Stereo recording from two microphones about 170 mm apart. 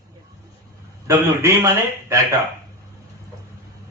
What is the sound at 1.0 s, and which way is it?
Speech, 15° right (ahead or behind).